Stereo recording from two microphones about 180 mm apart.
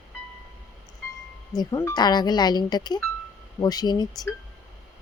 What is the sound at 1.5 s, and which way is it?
Speech, 20° left (ahead or behind).